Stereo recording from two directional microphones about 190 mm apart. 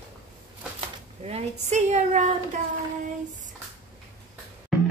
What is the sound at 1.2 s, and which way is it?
A woman's voice, 35° right (ahead or behind).